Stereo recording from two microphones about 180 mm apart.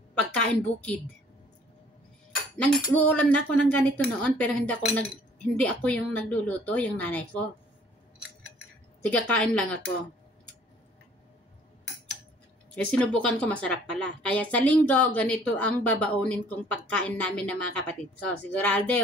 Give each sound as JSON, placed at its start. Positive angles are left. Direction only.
{"t": 0.4, "sound": "a woman's voice", "side_deg": 5}
{"t": 2.5, "sound": "cutlery", "side_deg": 5}
{"t": 2.8, "sound": "a woman's voice", "side_deg": 10}
{"t": 9.0, "sound": "a woman's voice", "side_deg": 5}
{"t": 12.7, "sound": "a woman's voice", "side_deg": 5}